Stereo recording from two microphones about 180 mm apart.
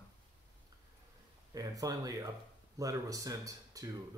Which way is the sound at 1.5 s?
20° right (ahead or behind).